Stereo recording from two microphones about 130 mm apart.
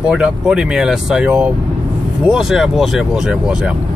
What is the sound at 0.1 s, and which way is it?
Speech, 5° right (ahead or behind).